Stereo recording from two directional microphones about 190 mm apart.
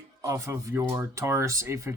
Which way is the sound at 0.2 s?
15° right (ahead or behind).